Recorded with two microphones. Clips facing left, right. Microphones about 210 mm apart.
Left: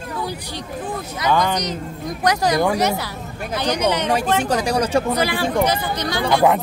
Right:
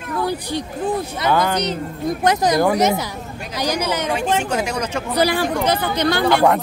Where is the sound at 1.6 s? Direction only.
30° right (ahead or behind); by 4.1 s 10° right (ahead or behind).